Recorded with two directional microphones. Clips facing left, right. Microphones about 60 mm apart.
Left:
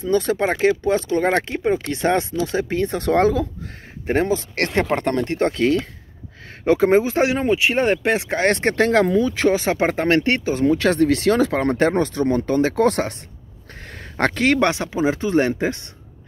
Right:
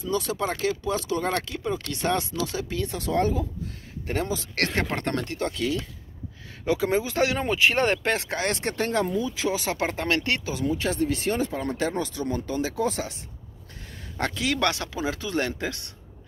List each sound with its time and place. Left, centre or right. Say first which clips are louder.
0.0 s speech: left 8 dB; left
3.1 s speech: left 7 dB; left
4.1 s speech: left 9 dB; left
5.2 s speech: left 9 dB; left
7.3 s speech: left 4 dB; centre
8.5 s speech: left 11 dB; left
8.7 s speech: left 8 dB; left
9.6 s speech: left 8 dB; left
10.6 s speech: left 10 dB; left
11.8 s speech: left 9 dB; left
13.8 s a sound: left 8 dB; left
14.6 s speech: left 7 dB; left